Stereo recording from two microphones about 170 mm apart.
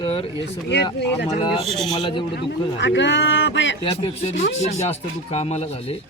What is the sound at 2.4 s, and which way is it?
A man's voice, 90° left.